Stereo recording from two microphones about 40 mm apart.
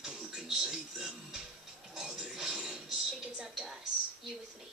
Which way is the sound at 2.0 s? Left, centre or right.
Centre.